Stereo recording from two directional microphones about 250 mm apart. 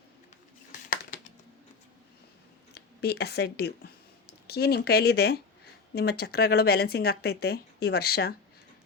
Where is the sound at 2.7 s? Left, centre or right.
Left.